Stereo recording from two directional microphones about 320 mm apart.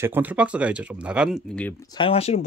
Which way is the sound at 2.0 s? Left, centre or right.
Centre.